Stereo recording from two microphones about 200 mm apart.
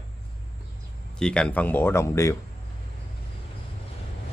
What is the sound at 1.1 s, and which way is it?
Speech, 5° left (ahead or behind).